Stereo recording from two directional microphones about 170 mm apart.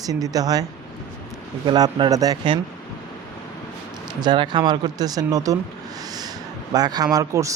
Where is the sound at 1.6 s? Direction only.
25° right (ahead or behind).